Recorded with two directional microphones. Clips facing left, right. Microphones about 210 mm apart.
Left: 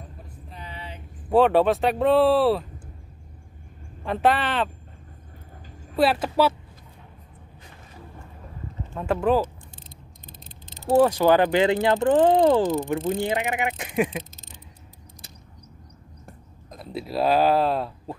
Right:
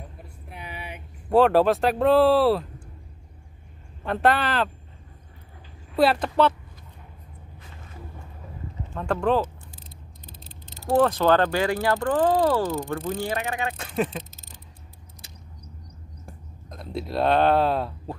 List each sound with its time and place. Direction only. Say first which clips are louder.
0.5 s a sound: right 2 dB; 10° right (ahead or behind)
1.3 s speech: even; centre (ahead or behind)
4.0 s speech: even; centre (ahead or behind)
5.9 s speech: even; 5° left (ahead or behind)
8.9 s a sound: left 1 dB; 5° left (ahead or behind)
11.0 s speech: left 2 dB; 10° left (ahead or behind)
16.3 s speech: even; centre (ahead or behind)